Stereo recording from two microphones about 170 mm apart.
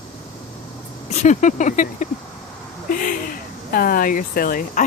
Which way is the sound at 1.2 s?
45° left (ahead or behind).